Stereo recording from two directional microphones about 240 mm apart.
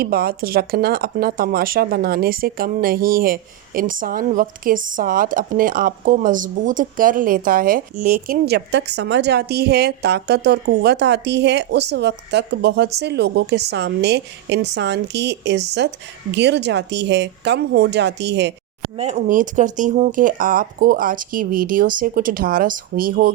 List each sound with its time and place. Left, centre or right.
0.0 s speech: right
18.9 s speech: right